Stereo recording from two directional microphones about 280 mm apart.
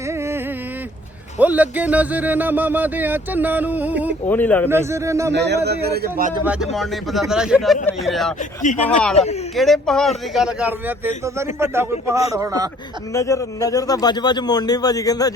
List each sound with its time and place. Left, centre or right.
0.1 s a sound: centre
1.4 s speech: centre
4.3 s a man's voice: centre
4.7 s a man's voice: centre
5.3 s a man's voice: right
6.4 s speech: centre
8.4 s speech: left
8.8 s a man's voice: centre
13.1 s a man's voice: centre